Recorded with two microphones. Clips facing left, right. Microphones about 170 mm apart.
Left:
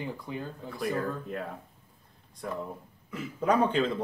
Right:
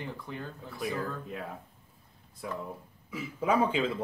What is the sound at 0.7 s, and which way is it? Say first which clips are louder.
Speech: left 3 dB; centre (ahead or behind).